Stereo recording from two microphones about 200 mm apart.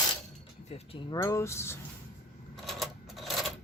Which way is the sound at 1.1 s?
15° left (ahead or behind).